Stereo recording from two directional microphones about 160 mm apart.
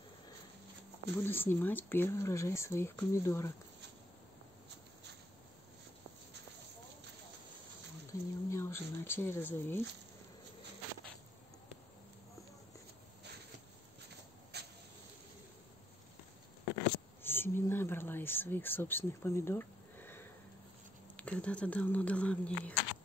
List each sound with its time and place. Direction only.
1.1 s speech: 15° left (ahead or behind)
8.1 s speech: 20° left (ahead or behind)
14.5 s a sound: 90° right
17.2 s speech: 15° left (ahead or behind)